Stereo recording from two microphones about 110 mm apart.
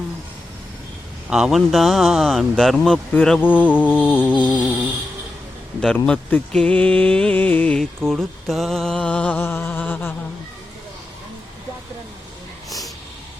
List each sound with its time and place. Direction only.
1.3 s speech: 5° right (ahead or behind)
3.1 s speech: 15° left (ahead or behind)
5.8 s speech: 10° left (ahead or behind)